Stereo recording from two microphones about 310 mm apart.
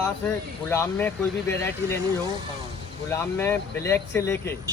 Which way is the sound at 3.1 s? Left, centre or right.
Centre.